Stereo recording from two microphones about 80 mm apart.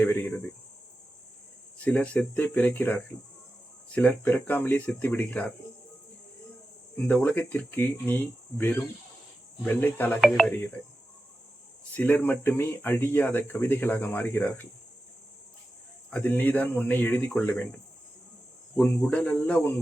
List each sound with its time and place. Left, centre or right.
0.0 s speech: left
1.8 s speech: centre
6.9 s speech: centre
10.2 s speech: centre
11.9 s speech: left
16.2 s speech: left